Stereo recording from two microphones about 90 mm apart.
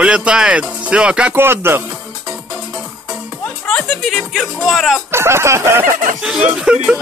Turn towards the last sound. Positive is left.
turn(degrees=-10)  # may be behind; listen again after turning